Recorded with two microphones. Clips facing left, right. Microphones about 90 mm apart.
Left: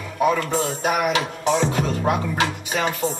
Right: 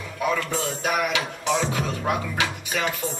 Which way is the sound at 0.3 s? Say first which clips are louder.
Left 4 dB; 40° left (ahead or behind).